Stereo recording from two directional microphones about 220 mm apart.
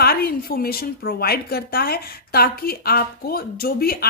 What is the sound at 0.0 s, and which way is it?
A woman's voice, 45° left (ahead or behind).